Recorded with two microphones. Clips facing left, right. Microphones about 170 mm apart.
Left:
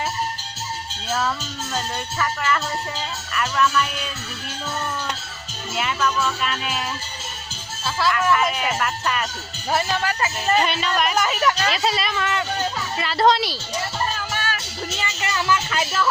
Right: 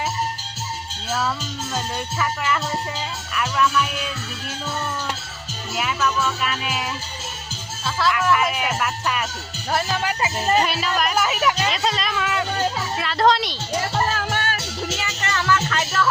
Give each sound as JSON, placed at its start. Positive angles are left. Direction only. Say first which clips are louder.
{"t": 1.7, "sound": "music", "louder": "even", "side_deg": -10}
{"t": 3.3, "sound": "speech", "louder": "even", "side_deg": -5}
{"t": 5.7, "sound": "speech", "louder": "even", "side_deg": -5}
{"t": 7.9, "sound": "speech", "louder": "even", "side_deg": 0}
{"t": 10.0, "sound": "music", "louder": "right 1 dB", "side_deg": -15}
{"t": 10.6, "sound": "speech", "louder": "even", "side_deg": -5}
{"t": 11.7, "sound": "speech", "louder": "left 1 dB", "side_deg": 5}
{"t": 14.1, "sound": "music", "louder": "right 3 dB", "side_deg": -65}
{"t": 15.2, "sound": "music", "louder": "right 1 dB", "side_deg": 10}